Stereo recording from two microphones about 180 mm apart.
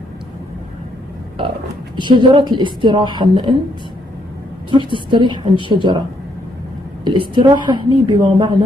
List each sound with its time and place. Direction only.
2.0 s a woman's voice: 25° right (ahead or behind)
4.6 s a woman's voice: 25° right (ahead or behind)
7.1 s a woman's voice: 25° right (ahead or behind)